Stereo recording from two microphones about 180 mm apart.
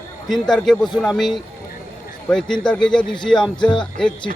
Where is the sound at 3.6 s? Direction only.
25° left (ahead or behind).